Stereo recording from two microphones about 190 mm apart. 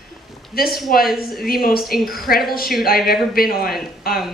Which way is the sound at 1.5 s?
50° left (ahead or behind).